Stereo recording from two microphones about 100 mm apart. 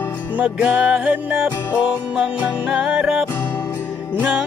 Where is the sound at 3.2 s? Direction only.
20° left (ahead or behind).